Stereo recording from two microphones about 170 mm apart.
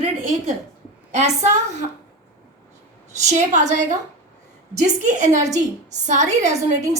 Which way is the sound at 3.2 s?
45° right (ahead or behind).